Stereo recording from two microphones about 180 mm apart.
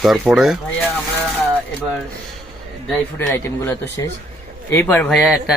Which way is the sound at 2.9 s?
10° left (ahead or behind).